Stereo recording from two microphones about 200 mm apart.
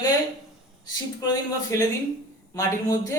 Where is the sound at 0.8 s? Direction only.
20° left (ahead or behind).